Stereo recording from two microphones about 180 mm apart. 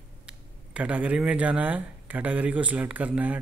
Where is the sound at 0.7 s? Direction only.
10° right (ahead or behind).